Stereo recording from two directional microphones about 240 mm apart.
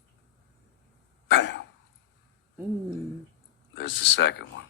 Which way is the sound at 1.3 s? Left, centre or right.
Left.